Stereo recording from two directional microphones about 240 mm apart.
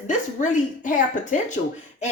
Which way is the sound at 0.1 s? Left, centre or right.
Left.